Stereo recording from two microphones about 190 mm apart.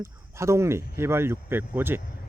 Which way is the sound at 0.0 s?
15° right (ahead or behind).